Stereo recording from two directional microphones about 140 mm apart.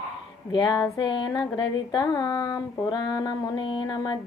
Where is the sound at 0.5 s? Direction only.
30° left (ahead or behind).